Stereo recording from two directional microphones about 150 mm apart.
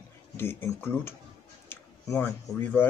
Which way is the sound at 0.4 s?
15° left (ahead or behind).